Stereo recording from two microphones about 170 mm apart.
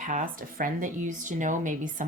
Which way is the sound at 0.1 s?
50° right (ahead or behind).